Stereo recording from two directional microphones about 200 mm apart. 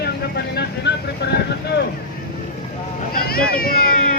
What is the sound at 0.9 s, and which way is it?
Speech, 55° left (ahead or behind).